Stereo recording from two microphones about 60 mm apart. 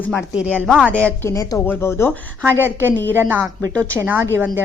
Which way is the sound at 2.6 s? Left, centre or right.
Right.